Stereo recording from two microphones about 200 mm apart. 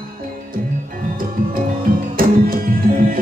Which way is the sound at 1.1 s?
45° right (ahead or behind).